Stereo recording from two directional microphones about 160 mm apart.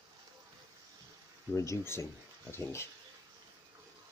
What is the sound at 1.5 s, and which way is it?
Speech, 20° left (ahead or behind).